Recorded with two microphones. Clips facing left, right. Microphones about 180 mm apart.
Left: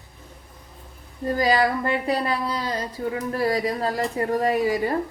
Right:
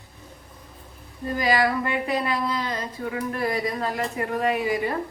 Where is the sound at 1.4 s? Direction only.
35° left (ahead or behind).